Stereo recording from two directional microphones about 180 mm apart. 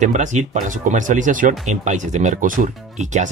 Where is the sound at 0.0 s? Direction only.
45° right (ahead or behind).